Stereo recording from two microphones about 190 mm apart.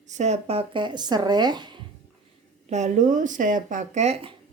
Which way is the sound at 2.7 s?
40° right (ahead or behind).